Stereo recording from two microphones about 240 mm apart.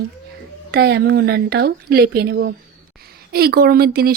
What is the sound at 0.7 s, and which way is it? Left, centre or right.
Speech, right.